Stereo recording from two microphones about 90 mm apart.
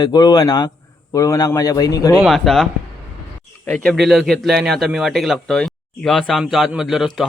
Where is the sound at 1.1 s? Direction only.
40° left (ahead or behind).